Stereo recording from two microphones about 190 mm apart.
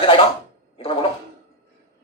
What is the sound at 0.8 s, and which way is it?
Gargling, 25° left (ahead or behind).